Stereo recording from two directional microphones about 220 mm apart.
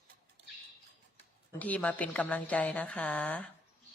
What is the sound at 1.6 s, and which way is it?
A woman's voice, 5° left (ahead or behind).